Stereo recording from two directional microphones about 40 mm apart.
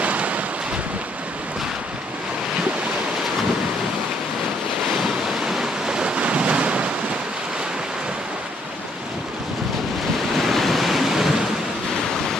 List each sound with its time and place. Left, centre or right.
0.0 s waves: right
5.5 s waves: centre
6.1 s waves: right
10.3 s waves: centre